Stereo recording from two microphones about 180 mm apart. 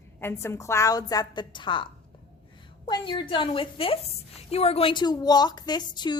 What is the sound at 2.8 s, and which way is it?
Speech, 25° left (ahead or behind).